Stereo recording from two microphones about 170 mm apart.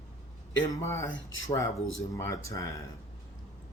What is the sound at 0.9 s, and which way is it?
Speech, 20° left (ahead or behind).